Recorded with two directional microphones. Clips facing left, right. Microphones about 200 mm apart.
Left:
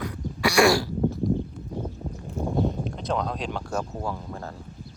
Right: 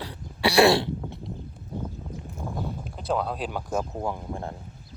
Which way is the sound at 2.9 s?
5° right (ahead or behind).